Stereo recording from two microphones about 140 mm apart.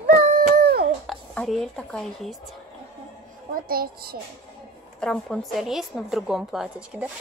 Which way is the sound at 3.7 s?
90° right.